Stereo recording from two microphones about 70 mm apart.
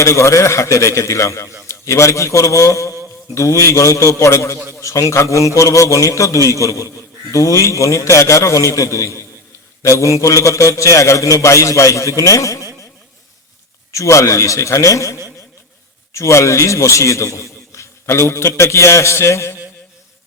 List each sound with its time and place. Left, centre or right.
0.0 s a man's voice: left
13.9 s a man's voice: left
16.1 s a man's voice: left